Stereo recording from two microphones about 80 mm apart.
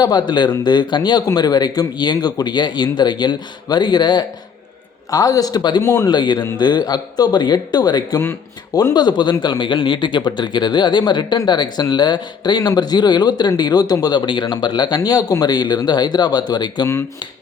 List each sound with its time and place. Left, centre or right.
0.0 s a man's voice: left
5.1 s a man's voice: left
5.8 s speech: left
6.1 s a man's voice: left